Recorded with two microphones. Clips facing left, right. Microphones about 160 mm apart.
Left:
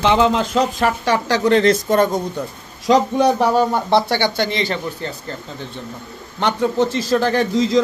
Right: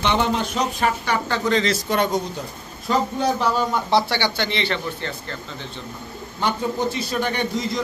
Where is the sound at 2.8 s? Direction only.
80° left; by 5.1 s 40° left (ahead or behind).